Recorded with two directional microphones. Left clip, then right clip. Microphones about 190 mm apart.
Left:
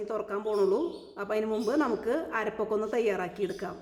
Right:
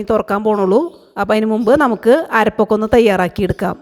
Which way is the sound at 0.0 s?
45° right (ahead or behind).